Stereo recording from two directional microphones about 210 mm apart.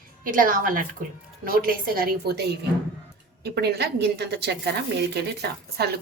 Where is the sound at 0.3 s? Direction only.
40° right (ahead or behind).